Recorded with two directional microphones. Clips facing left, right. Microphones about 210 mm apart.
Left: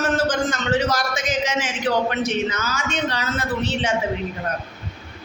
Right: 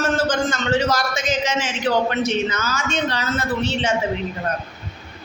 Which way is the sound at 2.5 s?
15° left (ahead or behind).